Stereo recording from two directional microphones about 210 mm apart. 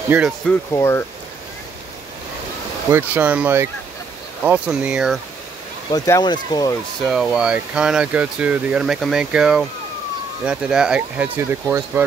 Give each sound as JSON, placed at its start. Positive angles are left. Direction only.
{"t": 0.5, "sound": "speech", "side_deg": 10}
{"t": 2.9, "sound": "speech", "side_deg": -10}
{"t": 5.9, "sound": "speech", "side_deg": 15}
{"t": 7.0, "sound": "speech", "side_deg": 0}